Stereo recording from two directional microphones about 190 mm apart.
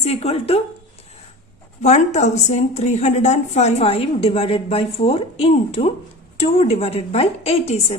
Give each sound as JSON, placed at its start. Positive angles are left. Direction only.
{"t": 0.0, "sound": "a woman's voice", "side_deg": 35}
{"t": 1.8, "sound": "a woman's voice", "side_deg": 35}